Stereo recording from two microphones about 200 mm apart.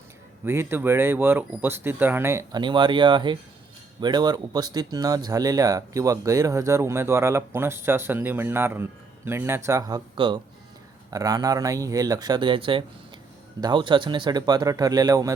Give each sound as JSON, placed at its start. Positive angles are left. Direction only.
{"t": 0.4, "sound": "speech", "side_deg": -10}